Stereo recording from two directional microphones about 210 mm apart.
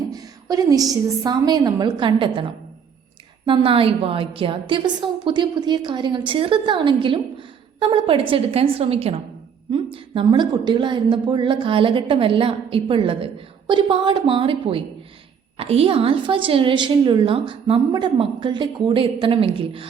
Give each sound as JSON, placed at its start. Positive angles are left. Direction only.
{"t": 0.1, "sound": "a woman's voice", "side_deg": -15}